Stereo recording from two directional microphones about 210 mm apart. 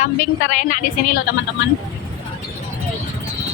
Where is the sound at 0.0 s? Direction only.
40° left (ahead or behind).